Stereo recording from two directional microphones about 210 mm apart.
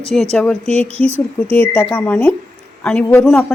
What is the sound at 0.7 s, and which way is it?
Speech, 30° right (ahead or behind).